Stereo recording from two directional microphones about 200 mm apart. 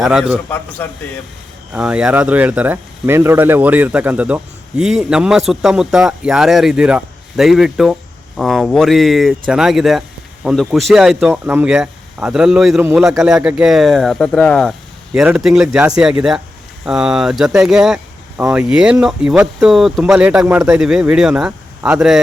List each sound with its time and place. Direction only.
0.0 s a man's voice: 5° right (ahead or behind)
0.5 s a man's voice: 10° left (ahead or behind)
1.7 s a man's voice: 5° right (ahead or behind)